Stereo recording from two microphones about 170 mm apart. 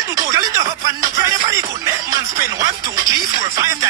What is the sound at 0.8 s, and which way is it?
Music, 20° right (ahead or behind).